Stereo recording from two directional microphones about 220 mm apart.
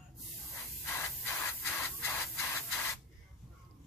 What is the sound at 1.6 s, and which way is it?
Rub, 10° left (ahead or behind).